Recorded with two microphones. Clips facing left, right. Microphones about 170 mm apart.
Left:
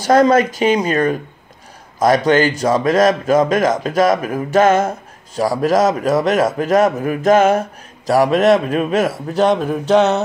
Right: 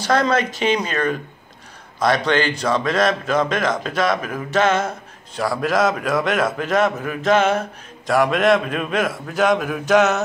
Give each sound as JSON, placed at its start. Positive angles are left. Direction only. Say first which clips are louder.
{"t": 0.0, "sound": "a man's voice", "louder": "left 7 dB", "side_deg": 45}